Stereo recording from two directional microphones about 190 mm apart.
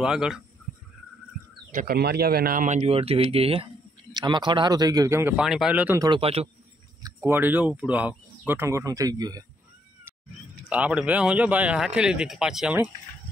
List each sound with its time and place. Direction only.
0.0 s speech: 5° right (ahead or behind)
1.7 s speech: 45° right (ahead or behind); by 6.0 s 10° right (ahead or behind)
6.0 s a man's voice: 25° right (ahead or behind)
7.0 s speech: 15° right (ahead or behind)
10.7 s speech: 5° right (ahead or behind)